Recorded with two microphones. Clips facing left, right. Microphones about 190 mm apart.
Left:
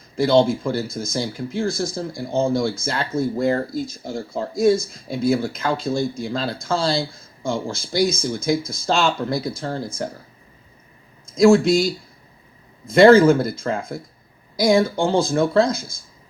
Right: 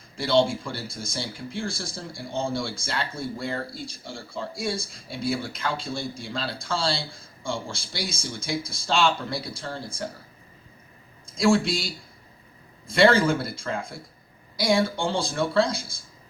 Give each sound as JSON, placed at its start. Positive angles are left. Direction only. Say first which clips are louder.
{"t": 0.2, "sound": "speech", "louder": "left 6 dB", "side_deg": 40}
{"t": 11.3, "sound": "speech", "louder": "left 8 dB", "side_deg": 45}